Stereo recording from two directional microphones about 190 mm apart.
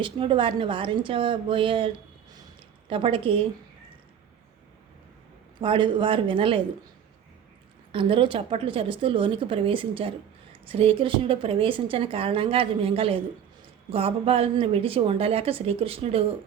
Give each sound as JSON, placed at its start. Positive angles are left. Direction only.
{"t": 0.0, "sound": "a woman's voice", "side_deg": -25}
{"t": 2.9, "sound": "a woman's voice", "side_deg": -30}
{"t": 5.5, "sound": "a woman's voice", "side_deg": -25}
{"t": 7.9, "sound": "a woman's voice", "side_deg": -25}